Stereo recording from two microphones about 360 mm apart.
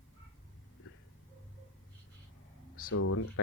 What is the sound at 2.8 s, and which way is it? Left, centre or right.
Speech, left.